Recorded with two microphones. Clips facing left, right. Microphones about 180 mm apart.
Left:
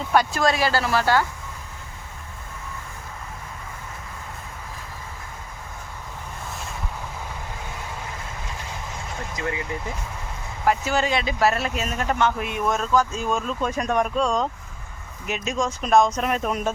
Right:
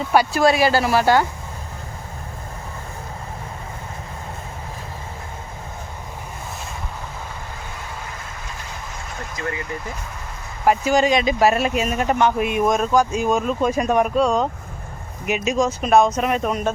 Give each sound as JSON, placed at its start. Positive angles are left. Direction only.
{"t": 0.1, "sound": "speech", "side_deg": -10}
{"t": 9.3, "sound": "speech", "side_deg": 15}
{"t": 10.7, "sound": "speech", "side_deg": -15}